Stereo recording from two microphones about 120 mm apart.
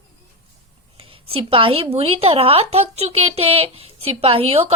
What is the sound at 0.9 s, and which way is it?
A woman's voice, 50° right (ahead or behind).